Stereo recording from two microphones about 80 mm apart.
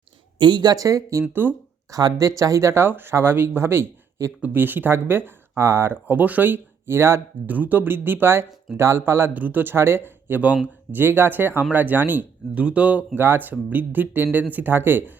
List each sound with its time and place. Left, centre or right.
0.3 s speech: right
1.3 s speech: right
1.9 s speech: right
7.4 s speech: right
13.1 s speech: right